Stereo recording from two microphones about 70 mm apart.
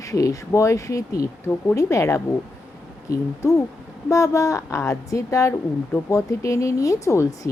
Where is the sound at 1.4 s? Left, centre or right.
Left.